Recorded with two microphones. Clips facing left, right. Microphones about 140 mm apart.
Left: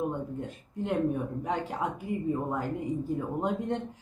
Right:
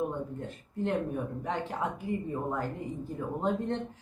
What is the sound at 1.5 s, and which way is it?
Speech, 10° left (ahead or behind).